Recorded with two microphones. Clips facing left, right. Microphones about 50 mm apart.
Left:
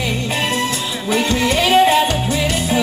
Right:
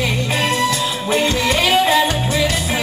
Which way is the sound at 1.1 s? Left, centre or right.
Right.